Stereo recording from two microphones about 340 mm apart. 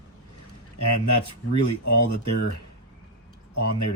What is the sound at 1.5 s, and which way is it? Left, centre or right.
Speech, left.